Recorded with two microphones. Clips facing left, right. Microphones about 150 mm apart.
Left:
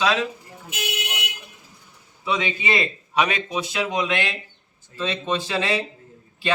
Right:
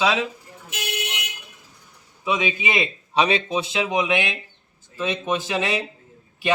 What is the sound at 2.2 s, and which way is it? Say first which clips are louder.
Speech: right 1 dB; 15° right (ahead or behind).